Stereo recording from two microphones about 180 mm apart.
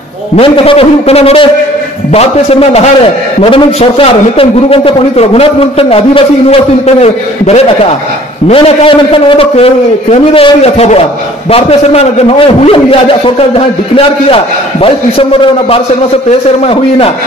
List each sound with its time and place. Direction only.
0.4 s a man's voice: 30° left (ahead or behind)